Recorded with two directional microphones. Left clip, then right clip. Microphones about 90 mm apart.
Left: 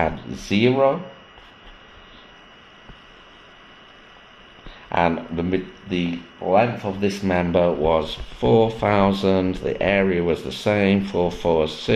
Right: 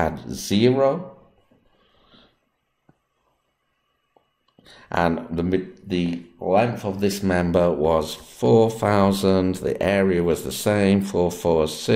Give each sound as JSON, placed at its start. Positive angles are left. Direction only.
{"t": 0.3, "sound": "speech", "side_deg": -35}
{"t": 4.8, "sound": "speech", "side_deg": -40}
{"t": 7.0, "sound": "speech", "side_deg": -35}